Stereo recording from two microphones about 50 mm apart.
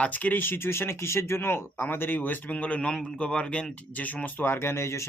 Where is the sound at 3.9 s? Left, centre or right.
Left.